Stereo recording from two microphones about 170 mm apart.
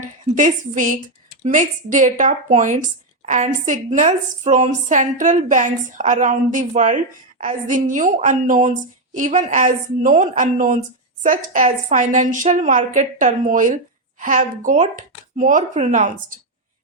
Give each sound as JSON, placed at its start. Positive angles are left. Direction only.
{"t": 0.0, "sound": "a woman's voice", "side_deg": -50}